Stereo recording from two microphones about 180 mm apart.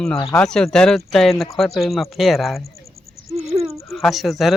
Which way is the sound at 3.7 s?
Centre (ahead or behind).